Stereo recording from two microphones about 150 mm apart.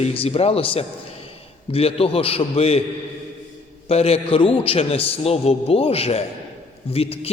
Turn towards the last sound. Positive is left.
turn(degrees=40)  # may be behind; listen again after turning